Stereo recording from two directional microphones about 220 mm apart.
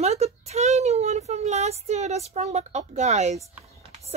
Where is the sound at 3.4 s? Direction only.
5° right (ahead or behind).